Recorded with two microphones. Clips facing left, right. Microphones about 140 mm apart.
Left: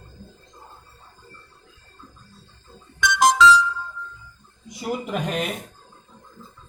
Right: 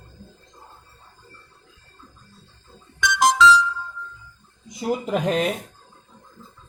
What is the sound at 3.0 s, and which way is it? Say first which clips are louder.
Music: left 1 dB; 50° left (ahead or behind).